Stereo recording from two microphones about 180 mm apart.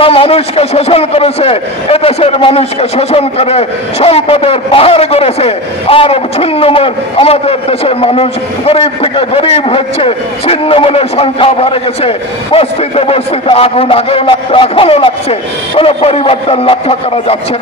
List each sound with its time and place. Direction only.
0.0 s a man's voice: 30° left (ahead or behind)